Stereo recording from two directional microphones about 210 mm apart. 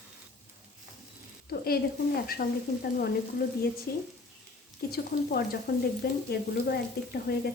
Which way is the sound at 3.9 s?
50° left (ahead or behind).